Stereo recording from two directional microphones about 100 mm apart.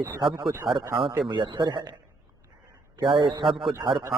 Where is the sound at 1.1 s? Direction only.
50° right (ahead or behind).